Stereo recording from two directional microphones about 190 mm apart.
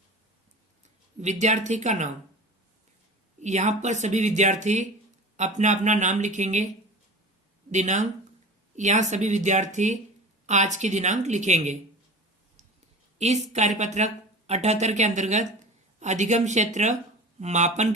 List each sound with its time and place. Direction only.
1.2 s speech: 40° right (ahead or behind)
3.4 s speech: 40° right (ahead or behind)
7.7 s speech: 40° right (ahead or behind)
13.1 s speech: 35° right (ahead or behind)